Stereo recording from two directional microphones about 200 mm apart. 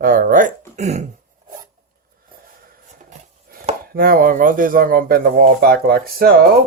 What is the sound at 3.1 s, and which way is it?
Speech, 40° right (ahead or behind).